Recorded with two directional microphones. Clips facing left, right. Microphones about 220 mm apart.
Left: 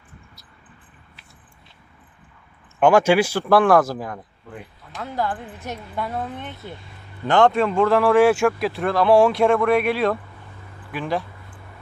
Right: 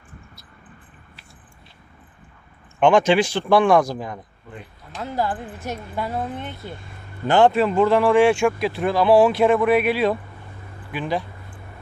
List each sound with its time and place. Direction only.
2.8 s speech: 10° left (ahead or behind)
5.1 s speech: 10° right (ahead or behind)
6.7 s vehicle: 50° right (ahead or behind)
7.3 s speech: 5° right (ahead or behind)